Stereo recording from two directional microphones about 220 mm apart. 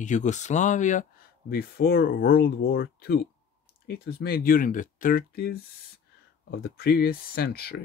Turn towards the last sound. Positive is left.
turn(degrees=45)  # may be behind; listen again after turning